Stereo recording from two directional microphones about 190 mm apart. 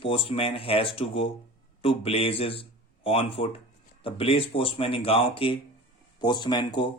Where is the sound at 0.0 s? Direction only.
30° left (ahead or behind).